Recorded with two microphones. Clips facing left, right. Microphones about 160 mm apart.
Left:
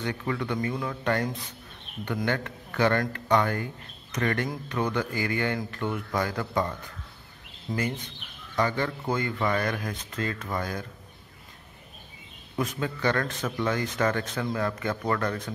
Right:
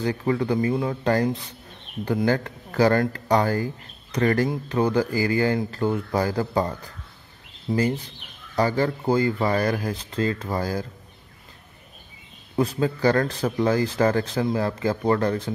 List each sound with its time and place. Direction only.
0.0 s speech: 30° right (ahead or behind)
7.7 s speech: 35° right (ahead or behind)
12.5 s speech: 30° right (ahead or behind)